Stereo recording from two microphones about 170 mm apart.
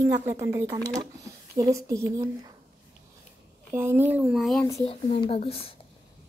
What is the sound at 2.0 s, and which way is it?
Speech, 25° right (ahead or behind).